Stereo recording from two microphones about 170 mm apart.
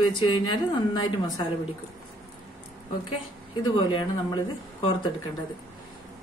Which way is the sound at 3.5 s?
25° left (ahead or behind).